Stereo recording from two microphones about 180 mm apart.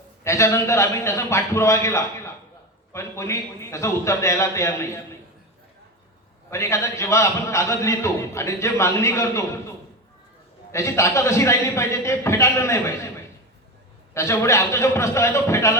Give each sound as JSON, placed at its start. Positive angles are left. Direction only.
{"t": 0.3, "sound": "a man's voice", "side_deg": 15}
{"t": 6.5, "sound": "a man's voice", "side_deg": 15}
{"t": 10.7, "sound": "a man's voice", "side_deg": 15}
{"t": 14.1, "sound": "a man's voice", "side_deg": 15}